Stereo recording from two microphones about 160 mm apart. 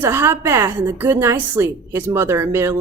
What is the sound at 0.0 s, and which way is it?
A woman's voice, 15° right (ahead or behind).